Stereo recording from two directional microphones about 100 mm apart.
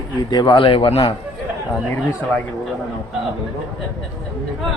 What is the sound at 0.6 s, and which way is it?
Speech, 60° left (ahead or behind).